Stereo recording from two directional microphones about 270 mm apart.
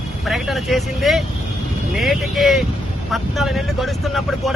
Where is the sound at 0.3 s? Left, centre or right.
Centre.